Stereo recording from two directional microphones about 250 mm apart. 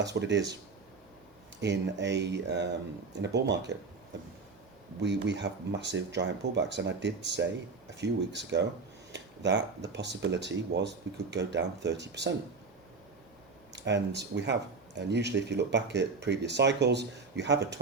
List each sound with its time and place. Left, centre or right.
0.0 s speech: right
1.6 s speech: right
5.0 s speech: right
13.7 s speech: right